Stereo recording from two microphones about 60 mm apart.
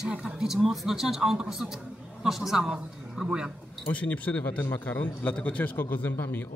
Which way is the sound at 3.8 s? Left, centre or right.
Left.